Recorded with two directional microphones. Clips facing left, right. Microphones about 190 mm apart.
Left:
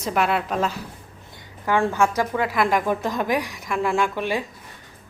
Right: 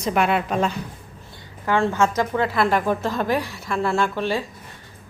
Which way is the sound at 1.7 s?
15° left (ahead or behind).